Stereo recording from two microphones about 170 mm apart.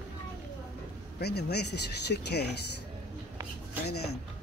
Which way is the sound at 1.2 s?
75° left (ahead or behind).